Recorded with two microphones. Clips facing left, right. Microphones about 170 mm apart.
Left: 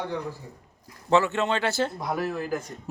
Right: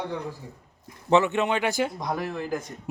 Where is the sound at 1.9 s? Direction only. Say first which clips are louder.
Left 1 dB; 5° left (ahead or behind).